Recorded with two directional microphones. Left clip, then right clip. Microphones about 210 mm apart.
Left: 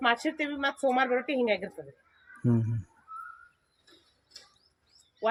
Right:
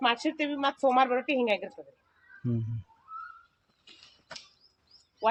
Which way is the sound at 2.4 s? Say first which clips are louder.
Left 6 dB; 45° left (ahead or behind).